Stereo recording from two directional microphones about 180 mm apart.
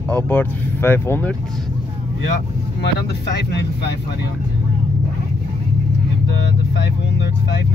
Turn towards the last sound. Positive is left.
turn(degrees=80)